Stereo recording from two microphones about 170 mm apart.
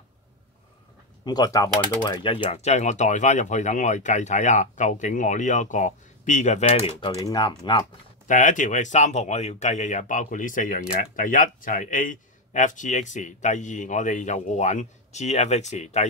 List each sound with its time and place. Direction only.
1.2 s speech: 25° left (ahead or behind)
2.2 s speech: 30° left (ahead or behind)
7.1 s speech: 25° left (ahead or behind)
8.3 s speech: 50° left (ahead or behind)